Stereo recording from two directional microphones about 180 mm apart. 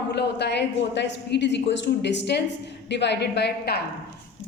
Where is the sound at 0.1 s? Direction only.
70° left (ahead or behind).